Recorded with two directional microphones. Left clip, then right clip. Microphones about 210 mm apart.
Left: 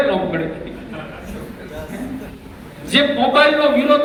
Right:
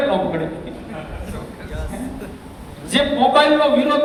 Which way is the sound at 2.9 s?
10° right (ahead or behind).